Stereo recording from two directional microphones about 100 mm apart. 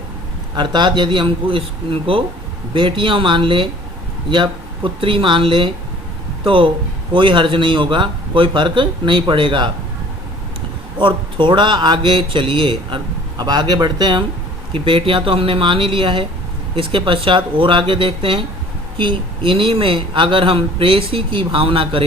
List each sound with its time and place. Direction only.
0.5 s speech: 50° right (ahead or behind)
11.0 s speech: 55° right (ahead or behind)
13.4 s speech: 45° right (ahead or behind)
14.7 s speech: 60° right (ahead or behind)